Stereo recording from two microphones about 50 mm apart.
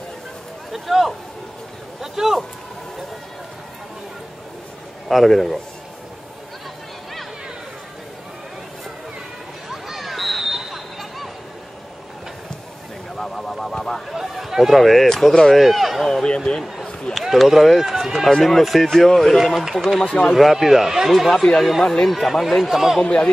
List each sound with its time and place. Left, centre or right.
0.7 s speech: centre
5.0 s speech: centre
9.7 s a sound: centre
13.2 s a sound: centre
14.1 s a sound: centre
15.0 s speech: centre
16.3 s speech: centre
17.1 s speech: centre
22.1 s speech: centre
23.0 s speech: centre